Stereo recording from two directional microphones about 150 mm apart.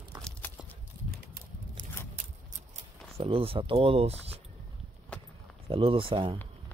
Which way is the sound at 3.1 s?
40° right (ahead or behind).